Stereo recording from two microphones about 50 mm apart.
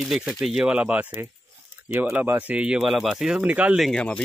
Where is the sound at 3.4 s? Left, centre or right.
Right.